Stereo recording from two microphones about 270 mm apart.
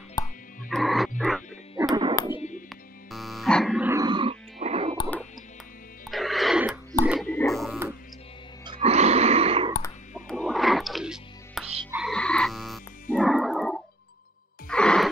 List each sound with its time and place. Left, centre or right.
0.2 s frog: centre
0.7 s frog: centre
2.7 s music: centre; by 4.9 s right
6.0 s music: centre
7.1 s a sound: centre
8.6 s a sound: right
10.1 s music: centre
11.9 s frog: centre
13.1 s music: centre
14.7 s gasp: centre